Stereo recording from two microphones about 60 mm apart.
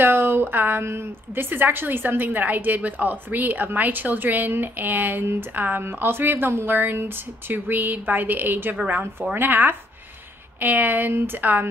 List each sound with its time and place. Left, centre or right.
0.0 s a woman's voice: right